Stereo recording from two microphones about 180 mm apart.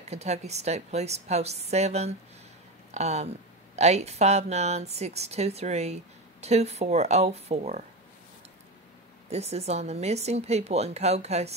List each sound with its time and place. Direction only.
0.1 s speech: 35° right (ahead or behind)
9.3 s speech: 35° right (ahead or behind)